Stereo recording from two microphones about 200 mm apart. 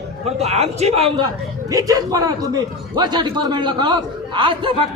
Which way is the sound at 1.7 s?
15° right (ahead or behind).